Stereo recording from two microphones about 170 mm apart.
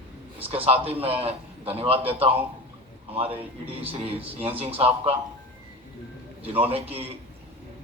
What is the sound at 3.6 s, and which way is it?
A man's voice, 35° right (ahead or behind).